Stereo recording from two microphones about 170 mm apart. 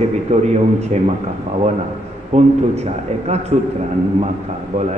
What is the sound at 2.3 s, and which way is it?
Speech, 40° right (ahead or behind).